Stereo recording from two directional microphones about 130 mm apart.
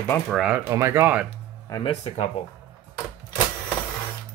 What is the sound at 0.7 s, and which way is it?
Speech, 20° right (ahead or behind).